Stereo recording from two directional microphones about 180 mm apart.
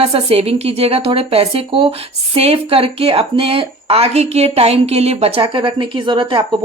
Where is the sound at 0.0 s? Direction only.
30° right (ahead or behind).